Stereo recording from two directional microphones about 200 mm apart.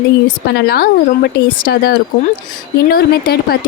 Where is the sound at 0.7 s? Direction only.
50° left (ahead or behind).